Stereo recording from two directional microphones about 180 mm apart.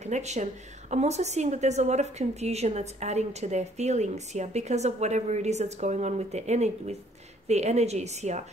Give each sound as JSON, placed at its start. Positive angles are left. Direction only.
{"t": 0.0, "sound": "a woman's voice", "side_deg": -40}